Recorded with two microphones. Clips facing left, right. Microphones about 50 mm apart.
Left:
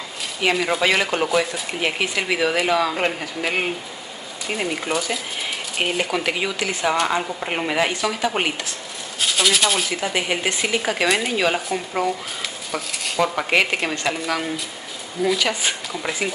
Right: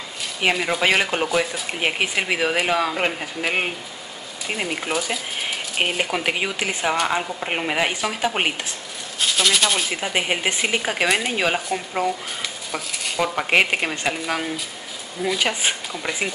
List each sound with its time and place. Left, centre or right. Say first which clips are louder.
0.4 s speech: left 1 dB; centre
1.7 s speech: even; centre
2.9 s speech: left 1 dB; centre
6.9 s speech: left 1 dB; centre
7.9 s a woman's voice: left 1 dB; centre
9.2 s speech: even; centre
9.8 s speech: even; centre
13.5 s speech: right 3 dB; centre
13.7 s speech: left 1 dB; centre
15.3 s a woman's voice: even; centre
15.9 s speech: left 1 dB; centre